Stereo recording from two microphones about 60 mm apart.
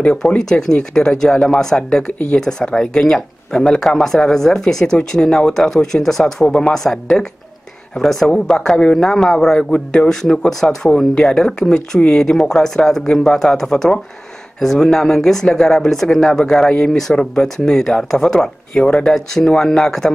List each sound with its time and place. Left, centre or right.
0.0 s speech: centre